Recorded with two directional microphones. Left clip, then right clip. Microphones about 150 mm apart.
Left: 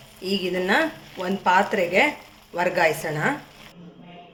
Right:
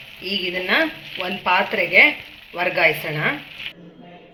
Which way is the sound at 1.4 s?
50° left (ahead or behind).